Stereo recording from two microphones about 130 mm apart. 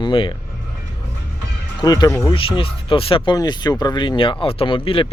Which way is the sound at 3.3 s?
35° left (ahead or behind).